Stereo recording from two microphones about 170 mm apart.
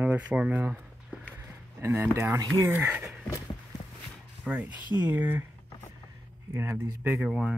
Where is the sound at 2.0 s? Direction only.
15° right (ahead or behind).